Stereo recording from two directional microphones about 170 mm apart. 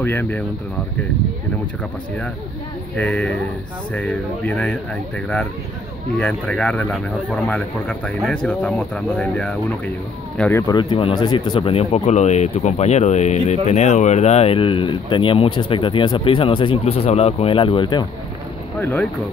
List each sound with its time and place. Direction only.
0.0 s speech: 10° left (ahead or behind)
3.0 s speech: 10° left (ahead or behind)
10.9 s speech: 35° left (ahead or behind)
18.8 s speech: 10° left (ahead or behind)